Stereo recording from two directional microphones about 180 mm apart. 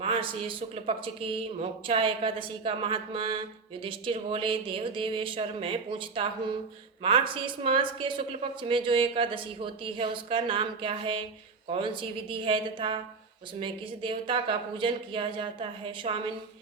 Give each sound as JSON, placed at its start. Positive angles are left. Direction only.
{"t": 0.0, "sound": "speech", "side_deg": -30}